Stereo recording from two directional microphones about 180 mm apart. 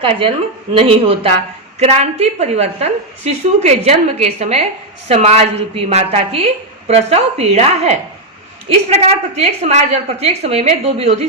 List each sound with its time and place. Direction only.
0.0 s a woman's voice: 30° right (ahead or behind)